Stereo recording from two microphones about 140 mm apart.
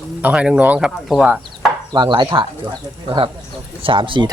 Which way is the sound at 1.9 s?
35° right (ahead or behind).